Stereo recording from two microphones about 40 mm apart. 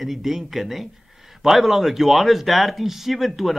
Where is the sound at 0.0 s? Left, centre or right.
Centre.